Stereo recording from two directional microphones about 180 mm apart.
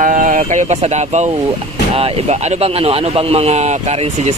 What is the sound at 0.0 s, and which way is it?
Speech, 45° right (ahead or behind).